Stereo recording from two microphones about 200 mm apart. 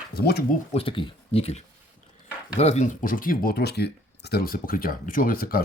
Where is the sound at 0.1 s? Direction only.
50° left (ahead or behind).